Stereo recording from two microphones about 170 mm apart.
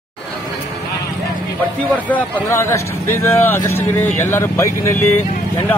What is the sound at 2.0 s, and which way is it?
Speech, 10° left (ahead or behind).